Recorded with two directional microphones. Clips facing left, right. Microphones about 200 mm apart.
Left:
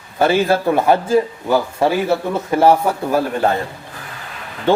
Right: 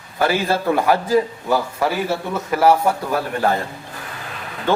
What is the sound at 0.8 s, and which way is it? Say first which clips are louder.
A man's voice: left 2 dB; 25° left (ahead or behind).